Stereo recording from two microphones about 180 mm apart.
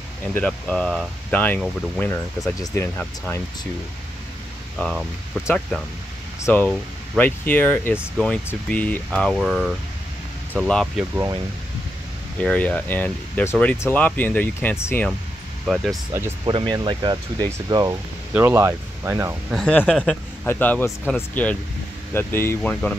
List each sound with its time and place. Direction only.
0.3 s speech: 5° left (ahead or behind)
4.7 s speech: centre (ahead or behind)
6.4 s speech: 10° left (ahead or behind)
12.4 s speech: 5° left (ahead or behind)
15.6 s speech: centre (ahead or behind)
16.1 s speech: 15° right (ahead or behind)
16.4 s speech: 25° right (ahead or behind)
19.5 s speech: 5° left (ahead or behind)